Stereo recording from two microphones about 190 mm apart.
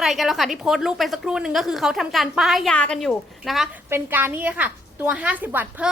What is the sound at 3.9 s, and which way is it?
A woman's voice, 10° right (ahead or behind).